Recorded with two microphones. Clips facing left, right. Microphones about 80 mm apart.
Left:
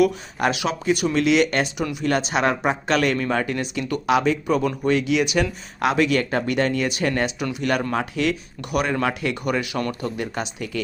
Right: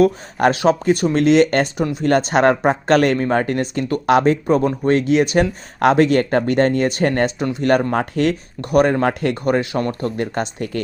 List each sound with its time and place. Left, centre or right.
0.0 s speech: right
10.2 s speech: right